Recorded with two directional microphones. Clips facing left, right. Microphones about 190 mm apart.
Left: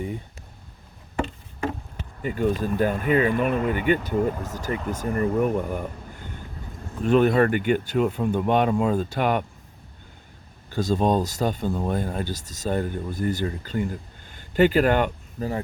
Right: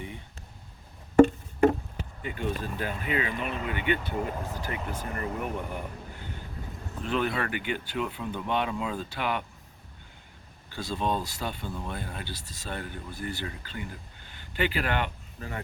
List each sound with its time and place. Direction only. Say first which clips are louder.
1.1 s music: right 11 dB; 45° right (ahead or behind)
2.2 s speech: left 9 dB; 40° left (ahead or behind)
10.7 s speech: left 8 dB; 45° left (ahead or behind)